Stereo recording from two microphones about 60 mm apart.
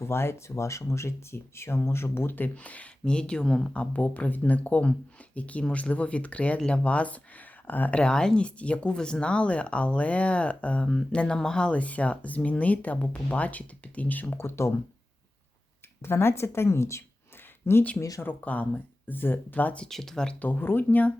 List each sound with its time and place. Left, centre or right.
0.0 s speech: left
3.0 s speech: centre
3.7 s speech: left
7.9 s speech: centre; by 14.3 s left
14.3 s speech: left
16.0 s speech: left
17.9 s speech: left
18.4 s speech: left
19.8 s speech: centre
20.4 s speech: left